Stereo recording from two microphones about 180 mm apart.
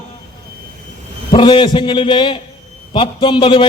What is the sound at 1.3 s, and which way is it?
A man's voice, 30° left (ahead or behind).